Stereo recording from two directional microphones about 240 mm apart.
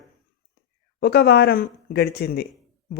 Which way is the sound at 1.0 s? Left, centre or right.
Left.